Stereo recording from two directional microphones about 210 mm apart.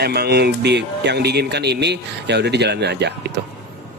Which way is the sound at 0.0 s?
50° right (ahead or behind).